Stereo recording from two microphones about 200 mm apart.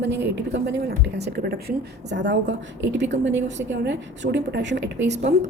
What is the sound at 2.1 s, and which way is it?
A woman's voice, 65° right (ahead or behind).